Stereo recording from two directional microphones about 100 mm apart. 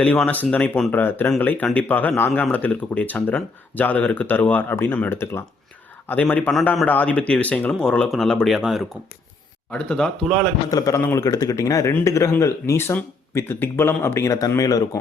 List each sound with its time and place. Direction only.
0.0 s speech: 15° left (ahead or behind); by 8.9 s centre (ahead or behind)
9.6 s speech: 10° left (ahead or behind)
10.7 s speech: 35° left (ahead or behind)